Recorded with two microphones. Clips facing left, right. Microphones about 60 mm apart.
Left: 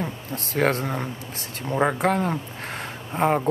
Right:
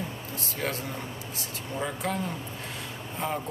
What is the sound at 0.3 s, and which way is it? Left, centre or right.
Speech, left.